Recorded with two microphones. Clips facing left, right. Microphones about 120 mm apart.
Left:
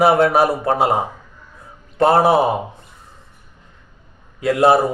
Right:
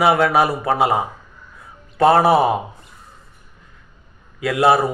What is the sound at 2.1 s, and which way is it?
Speech, 30° left (ahead or behind).